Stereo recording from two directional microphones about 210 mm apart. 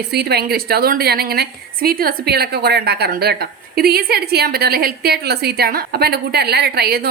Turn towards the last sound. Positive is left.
turn(degrees=-50)  # may be behind; listen again after turning